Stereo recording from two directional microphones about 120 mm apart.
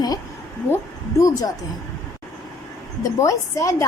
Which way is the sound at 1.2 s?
30° left (ahead or behind).